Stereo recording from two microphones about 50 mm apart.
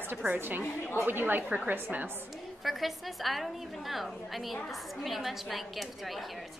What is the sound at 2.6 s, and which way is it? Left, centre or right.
A woman's voice, centre.